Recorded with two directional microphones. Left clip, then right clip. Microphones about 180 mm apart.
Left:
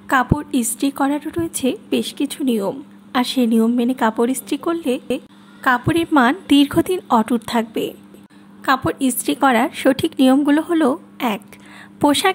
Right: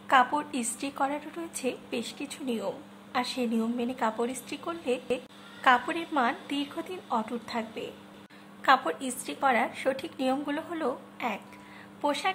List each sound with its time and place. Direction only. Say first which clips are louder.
0.1 s a woman's voice: left 6 dB; 30° left (ahead or behind)
5.9 s a woman's voice: left 13 dB; 40° left (ahead or behind)
8.6 s a woman's voice: left 5 dB; 25° left (ahead or behind)
9.0 s a woman's voice: left 11 dB; 45° left (ahead or behind)
12.0 s a woman's voice: left 13 dB; 50° left (ahead or behind)